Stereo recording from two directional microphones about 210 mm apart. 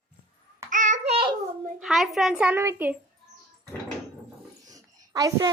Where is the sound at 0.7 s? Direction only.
35° right (ahead or behind).